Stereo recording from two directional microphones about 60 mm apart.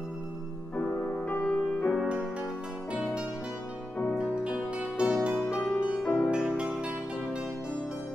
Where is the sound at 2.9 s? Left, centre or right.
Centre.